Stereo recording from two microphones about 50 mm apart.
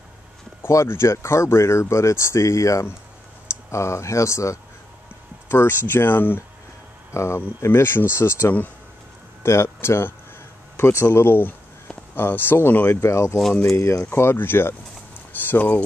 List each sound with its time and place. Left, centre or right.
0.8 s speech: left
5.5 s speech: left
7.2 s speech: left
7.6 s speech: left
10.8 s speech: left
11.1 s speech: left
14.1 s speech: left
15.4 s speech: left